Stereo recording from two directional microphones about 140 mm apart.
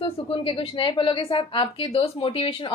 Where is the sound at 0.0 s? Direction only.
35° left (ahead or behind).